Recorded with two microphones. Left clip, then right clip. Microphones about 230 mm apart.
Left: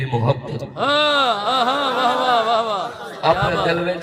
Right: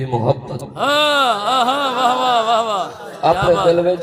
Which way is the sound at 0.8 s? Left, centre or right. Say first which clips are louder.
Right 2 dB; centre.